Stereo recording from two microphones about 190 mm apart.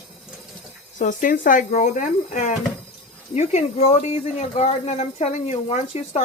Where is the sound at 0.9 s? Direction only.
45° left (ahead or behind).